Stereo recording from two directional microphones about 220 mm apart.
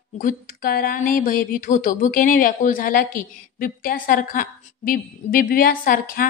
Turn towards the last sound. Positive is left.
turn(degrees=40)  # may be behind; listen again after turning